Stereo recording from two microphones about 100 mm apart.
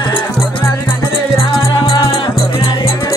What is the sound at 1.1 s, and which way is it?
Music, 65° left (ahead or behind).